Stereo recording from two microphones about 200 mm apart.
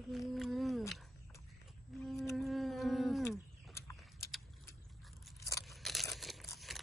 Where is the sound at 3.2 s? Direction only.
15° left (ahead or behind).